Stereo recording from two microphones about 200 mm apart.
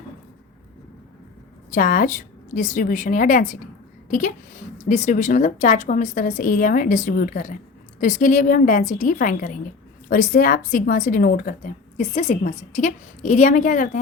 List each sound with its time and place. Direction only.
1.7 s speech: 45° left (ahead or behind)
4.9 s speech: 35° left (ahead or behind)